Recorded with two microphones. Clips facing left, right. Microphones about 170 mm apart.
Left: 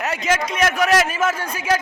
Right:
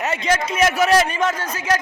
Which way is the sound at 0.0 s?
Centre (ahead or behind).